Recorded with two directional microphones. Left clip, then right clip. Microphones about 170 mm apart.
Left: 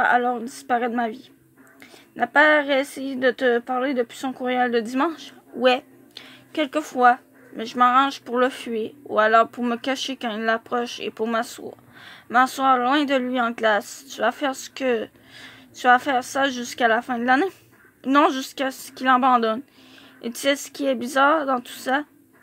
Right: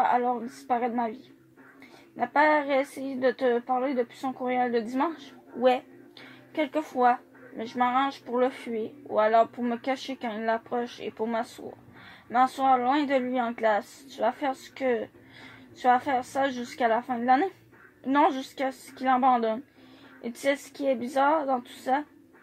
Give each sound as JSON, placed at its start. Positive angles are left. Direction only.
{"t": 0.0, "sound": "speech", "side_deg": 45}
{"t": 2.1, "sound": "speech", "side_deg": 45}
{"t": 6.5, "sound": "speech", "side_deg": 45}